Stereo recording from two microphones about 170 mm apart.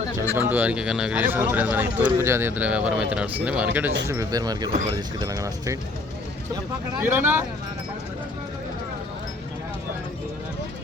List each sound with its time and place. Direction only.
0.3 s speech: 10° right (ahead or behind)
7.0 s speech: 10° right (ahead or behind)